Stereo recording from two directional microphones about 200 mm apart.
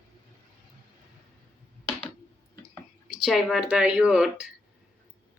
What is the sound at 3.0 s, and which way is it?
Speech, centre (ahead or behind).